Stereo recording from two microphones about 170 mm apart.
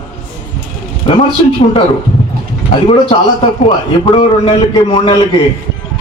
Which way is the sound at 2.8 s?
30° left (ahead or behind).